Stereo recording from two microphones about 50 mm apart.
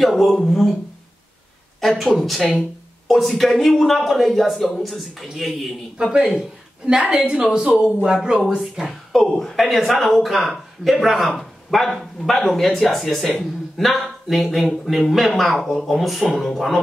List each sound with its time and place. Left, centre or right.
0.0 s speech: centre
1.8 s speech: centre
6.0 s a woman's voice: centre
7.8 s speech: centre